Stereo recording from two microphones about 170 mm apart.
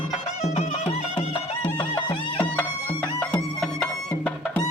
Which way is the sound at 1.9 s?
15° left (ahead or behind).